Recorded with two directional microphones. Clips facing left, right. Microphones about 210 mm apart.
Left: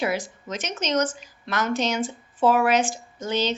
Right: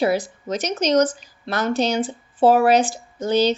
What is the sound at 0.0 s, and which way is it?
A woman's voice, 35° right (ahead or behind).